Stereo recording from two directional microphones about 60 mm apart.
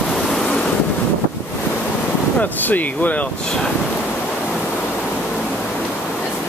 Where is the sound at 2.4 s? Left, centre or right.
Left.